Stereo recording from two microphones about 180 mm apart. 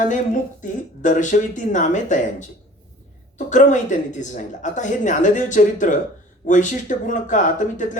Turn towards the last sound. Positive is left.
turn(degrees=45)  # may be behind; listen again after turning